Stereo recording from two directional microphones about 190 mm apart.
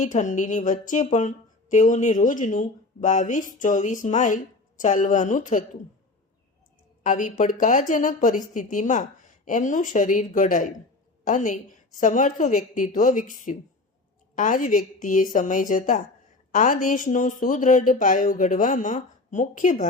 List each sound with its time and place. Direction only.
0.0 s a woman's voice: 40° left (ahead or behind)
7.0 s a woman's voice: 40° left (ahead or behind)